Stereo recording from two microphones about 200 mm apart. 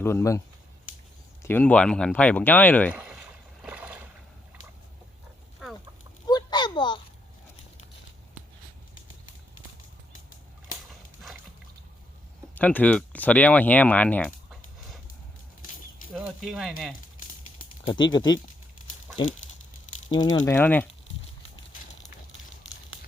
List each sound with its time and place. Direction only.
0.0 s speech: 10° left (ahead or behind)
0.9 s a sound: 40° left (ahead or behind)
1.4 s speech: 10° left (ahead or behind)
2.9 s boat: 5° right (ahead or behind)
6.2 s a sound: 20° left (ahead or behind)
12.5 s speech: 10° left (ahead or behind)
16.1 s speech: centre (ahead or behind)
17.8 s speech: 20° left (ahead or behind)
20.1 s speech: 20° left (ahead or behind)
20.6 s speech: 10° left (ahead or behind)